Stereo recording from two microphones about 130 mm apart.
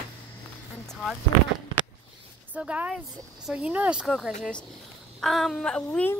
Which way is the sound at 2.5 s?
10° right (ahead or behind).